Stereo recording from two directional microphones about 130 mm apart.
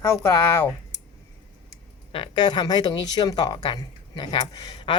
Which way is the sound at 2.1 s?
35° left (ahead or behind).